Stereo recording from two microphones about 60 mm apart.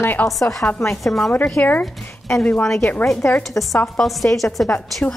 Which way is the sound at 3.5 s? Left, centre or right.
Left.